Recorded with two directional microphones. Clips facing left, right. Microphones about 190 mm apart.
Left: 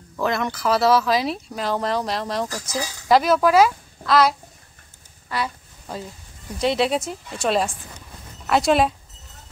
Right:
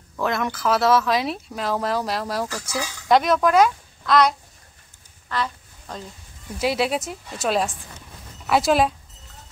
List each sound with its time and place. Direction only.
0.2 s speech: centre (ahead or behind)
2.5 s speech: 35° left (ahead or behind)
3.1 s speech: centre (ahead or behind)
5.3 s a sound: 10° left (ahead or behind)
6.6 s speech: 5° right (ahead or behind)